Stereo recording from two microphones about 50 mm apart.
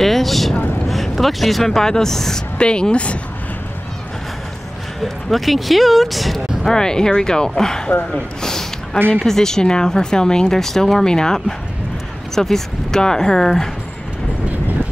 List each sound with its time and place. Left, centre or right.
0.0 s a sound: centre
0.8 s speech: centre
2.6 s speech: centre
5.0 s speech: centre